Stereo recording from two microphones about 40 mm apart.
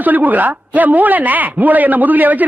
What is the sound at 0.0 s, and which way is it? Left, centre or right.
A woman's voice, right.